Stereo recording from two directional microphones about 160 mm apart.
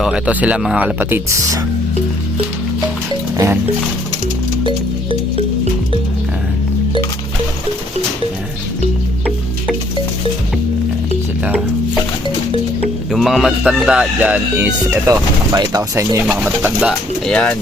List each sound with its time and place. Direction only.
0.0 s speech: 5° right (ahead or behind)
3.3 s music: 15° right (ahead or behind)
13.1 s speech: centre (ahead or behind)
17.3 s speech: 10° left (ahead or behind)